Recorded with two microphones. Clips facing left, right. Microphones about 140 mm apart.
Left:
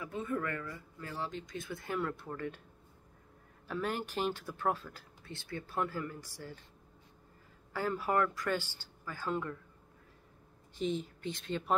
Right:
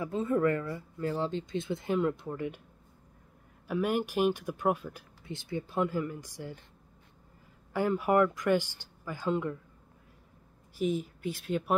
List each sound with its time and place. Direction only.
0.0 s speech: 25° right (ahead or behind)
3.6 s speech: 10° right (ahead or behind)
7.7 s speech: 15° right (ahead or behind)
10.7 s speech: 10° right (ahead or behind)